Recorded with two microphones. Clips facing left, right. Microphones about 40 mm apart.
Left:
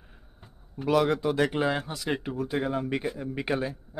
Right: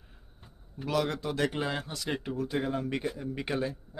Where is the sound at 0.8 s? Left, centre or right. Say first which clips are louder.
Left 6 dB; left.